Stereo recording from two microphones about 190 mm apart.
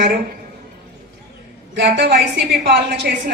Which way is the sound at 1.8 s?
60° right (ahead or behind).